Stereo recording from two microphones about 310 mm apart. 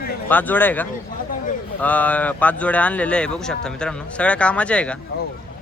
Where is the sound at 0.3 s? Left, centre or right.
Centre.